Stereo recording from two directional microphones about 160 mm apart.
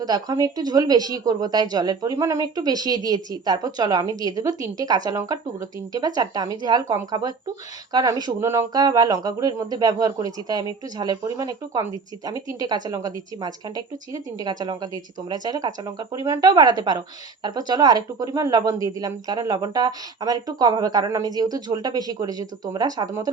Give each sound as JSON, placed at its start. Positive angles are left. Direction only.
{"t": 0.0, "sound": "speech", "side_deg": -25}